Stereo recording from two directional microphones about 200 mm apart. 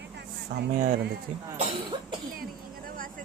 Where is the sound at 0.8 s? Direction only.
50° right (ahead or behind).